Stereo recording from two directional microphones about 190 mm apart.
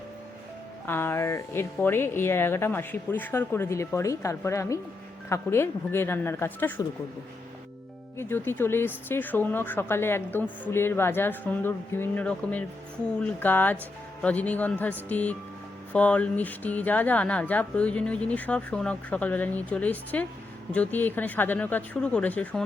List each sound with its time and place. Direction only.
0.9 s speech: 10° left (ahead or behind)
8.2 s speech: 10° left (ahead or behind)